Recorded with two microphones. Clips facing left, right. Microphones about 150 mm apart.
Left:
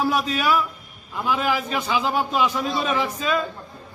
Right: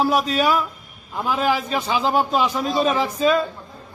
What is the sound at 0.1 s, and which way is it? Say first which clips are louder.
Speech: right 3 dB; 35° right (ahead or behind).